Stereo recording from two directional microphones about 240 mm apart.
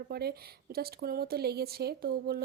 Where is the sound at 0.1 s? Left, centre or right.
Right.